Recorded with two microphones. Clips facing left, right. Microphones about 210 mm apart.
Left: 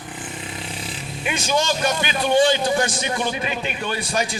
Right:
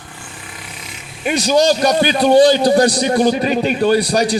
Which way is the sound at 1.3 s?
35° right (ahead or behind).